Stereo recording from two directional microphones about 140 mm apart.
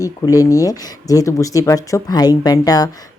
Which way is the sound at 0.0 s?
25° left (ahead or behind).